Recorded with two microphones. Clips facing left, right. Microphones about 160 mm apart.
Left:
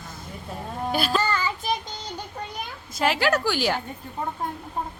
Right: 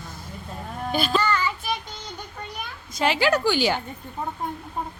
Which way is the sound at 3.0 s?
Centre (ahead or behind).